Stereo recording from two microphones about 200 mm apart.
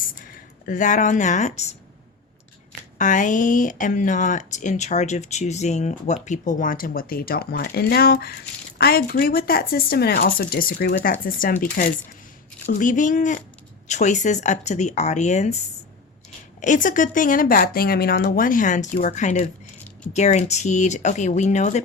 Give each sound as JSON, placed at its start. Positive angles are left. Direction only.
{"t": 0.6, "sound": "speech", "side_deg": 40}
{"t": 3.0, "sound": "speech", "side_deg": 40}
{"t": 16.6, "sound": "speech", "side_deg": 40}